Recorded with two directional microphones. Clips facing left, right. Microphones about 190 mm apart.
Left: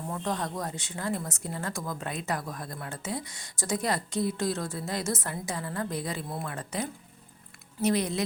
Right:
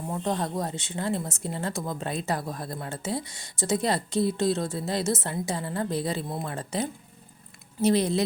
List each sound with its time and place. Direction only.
0.1 s speech: 25° right (ahead or behind)